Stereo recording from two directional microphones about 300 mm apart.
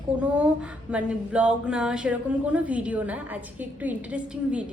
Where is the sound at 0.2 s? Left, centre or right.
Centre.